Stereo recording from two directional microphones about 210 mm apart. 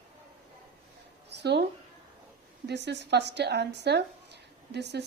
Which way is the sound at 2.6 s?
55° right (ahead or behind).